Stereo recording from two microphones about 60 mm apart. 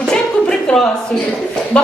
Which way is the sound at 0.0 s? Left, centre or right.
Centre.